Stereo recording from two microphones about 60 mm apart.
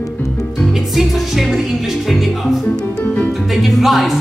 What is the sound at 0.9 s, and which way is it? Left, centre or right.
Music, centre.